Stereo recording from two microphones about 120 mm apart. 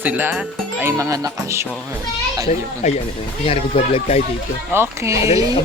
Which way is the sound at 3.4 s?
55° left (ahead or behind).